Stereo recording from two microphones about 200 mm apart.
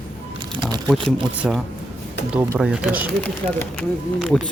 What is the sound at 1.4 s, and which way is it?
Speech, 5° right (ahead or behind).